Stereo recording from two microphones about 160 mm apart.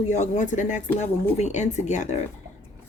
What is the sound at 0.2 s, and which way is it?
Speech, 50° left (ahead or behind).